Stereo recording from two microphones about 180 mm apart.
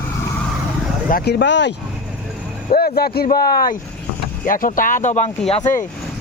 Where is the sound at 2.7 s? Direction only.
55° left (ahead or behind).